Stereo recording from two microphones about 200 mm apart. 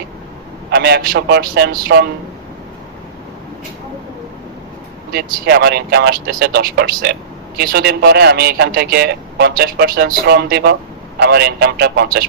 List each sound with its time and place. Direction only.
0.7 s speech: 55° right (ahead or behind)
5.1 s speech: 55° right (ahead or behind)